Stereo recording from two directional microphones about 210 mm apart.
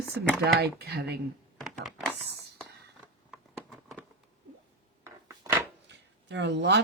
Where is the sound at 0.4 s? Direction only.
50° right (ahead or behind).